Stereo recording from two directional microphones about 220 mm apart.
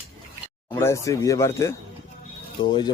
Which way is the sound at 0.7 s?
10° left (ahead or behind).